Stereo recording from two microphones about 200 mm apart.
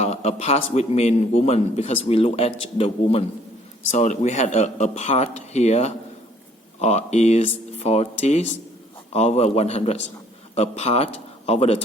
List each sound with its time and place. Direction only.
0.0 s a man's voice: 30° left (ahead or behind)